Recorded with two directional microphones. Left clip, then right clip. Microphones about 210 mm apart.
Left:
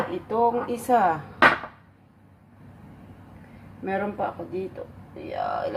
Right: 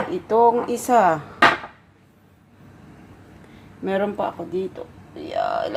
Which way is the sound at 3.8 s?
35° right (ahead or behind).